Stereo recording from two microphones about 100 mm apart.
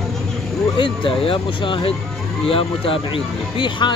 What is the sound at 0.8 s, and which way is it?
Speech, 60° left (ahead or behind).